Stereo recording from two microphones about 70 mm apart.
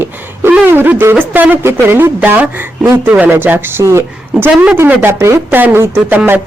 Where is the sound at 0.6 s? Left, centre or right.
Right.